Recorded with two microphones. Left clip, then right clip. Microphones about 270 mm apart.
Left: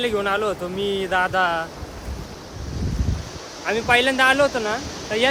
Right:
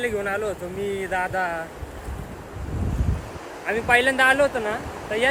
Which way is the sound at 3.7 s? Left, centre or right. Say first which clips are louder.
Left 1 dB; centre.